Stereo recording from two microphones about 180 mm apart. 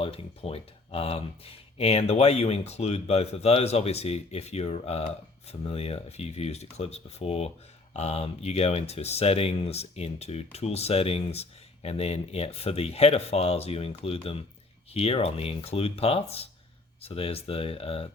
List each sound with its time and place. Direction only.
0.0 s speech: 30° left (ahead or behind)